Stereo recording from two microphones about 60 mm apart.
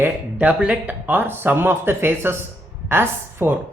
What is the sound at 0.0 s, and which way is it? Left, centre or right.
A woman's voice, right.